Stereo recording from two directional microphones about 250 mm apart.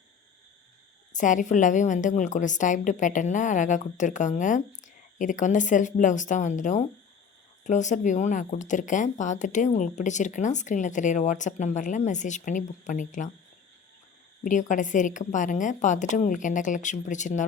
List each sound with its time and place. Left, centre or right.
1.1 s speech: left
14.4 s a woman's voice: left